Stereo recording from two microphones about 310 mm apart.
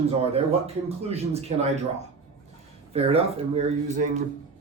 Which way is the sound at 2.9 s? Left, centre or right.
Centre.